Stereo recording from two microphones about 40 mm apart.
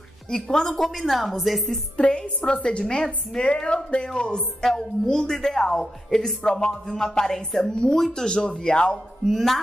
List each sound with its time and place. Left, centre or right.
0.3 s a woman's voice: centre
2.0 s a woman's voice: left
4.6 s a woman's voice: centre
9.2 s a woman's voice: centre